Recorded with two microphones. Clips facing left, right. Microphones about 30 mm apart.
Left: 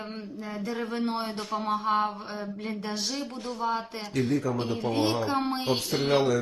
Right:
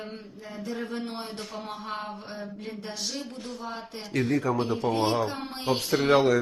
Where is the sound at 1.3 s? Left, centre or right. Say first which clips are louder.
Left 7 dB; centre.